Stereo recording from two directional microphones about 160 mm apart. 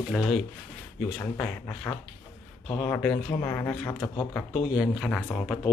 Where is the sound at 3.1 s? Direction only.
20° left (ahead or behind).